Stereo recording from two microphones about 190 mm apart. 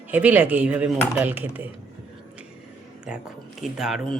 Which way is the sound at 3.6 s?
Centre (ahead or behind).